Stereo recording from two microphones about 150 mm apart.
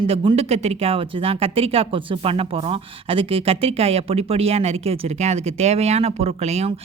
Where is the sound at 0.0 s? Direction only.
35° right (ahead or behind).